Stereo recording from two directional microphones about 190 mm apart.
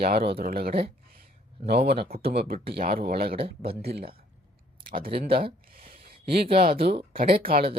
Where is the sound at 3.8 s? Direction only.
55° right (ahead or behind).